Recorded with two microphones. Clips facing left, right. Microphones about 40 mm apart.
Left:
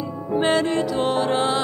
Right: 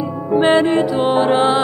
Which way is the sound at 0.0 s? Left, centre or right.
Right.